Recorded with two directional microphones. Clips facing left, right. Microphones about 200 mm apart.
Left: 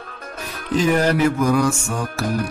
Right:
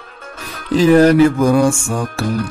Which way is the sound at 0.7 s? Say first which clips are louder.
Right 8 dB; 30° right (ahead or behind).